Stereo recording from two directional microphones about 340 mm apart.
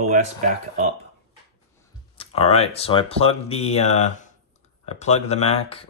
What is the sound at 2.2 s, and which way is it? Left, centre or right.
Speech, centre.